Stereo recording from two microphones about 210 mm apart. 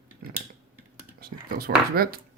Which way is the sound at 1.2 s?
45° right (ahead or behind).